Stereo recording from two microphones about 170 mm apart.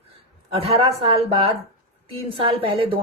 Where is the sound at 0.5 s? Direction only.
35° right (ahead or behind).